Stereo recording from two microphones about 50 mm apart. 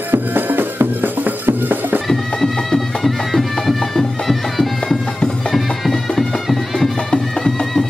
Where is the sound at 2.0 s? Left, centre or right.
Centre.